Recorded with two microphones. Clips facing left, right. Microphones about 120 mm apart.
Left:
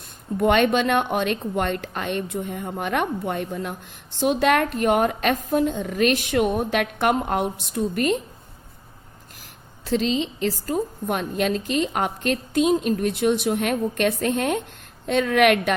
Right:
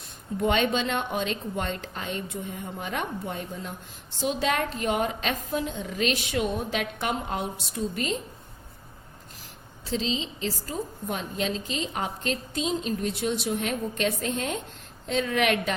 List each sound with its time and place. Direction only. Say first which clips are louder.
0.3 s a woman's voice: left 6 dB; 60° left (ahead or behind)
9.8 s a woman's voice: left 7 dB; 60° left (ahead or behind)